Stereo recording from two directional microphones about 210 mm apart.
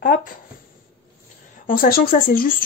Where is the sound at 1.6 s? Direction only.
40° left (ahead or behind).